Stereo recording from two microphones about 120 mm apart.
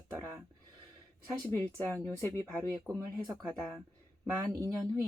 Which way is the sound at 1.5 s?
10° left (ahead or behind).